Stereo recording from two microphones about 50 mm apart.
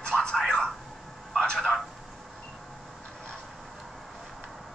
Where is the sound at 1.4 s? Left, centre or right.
Centre.